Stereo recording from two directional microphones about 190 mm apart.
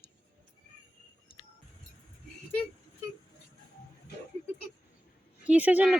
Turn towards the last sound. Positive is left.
turn(degrees=-10)  # may be behind; listen again after turning